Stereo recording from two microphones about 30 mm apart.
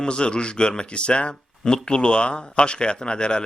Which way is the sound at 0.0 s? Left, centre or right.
Left.